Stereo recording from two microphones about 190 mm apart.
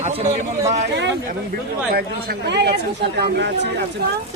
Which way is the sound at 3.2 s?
65° right (ahead or behind).